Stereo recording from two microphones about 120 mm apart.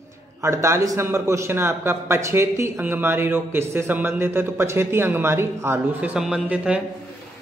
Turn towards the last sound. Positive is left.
turn(degrees=-10)  # may be behind; listen again after turning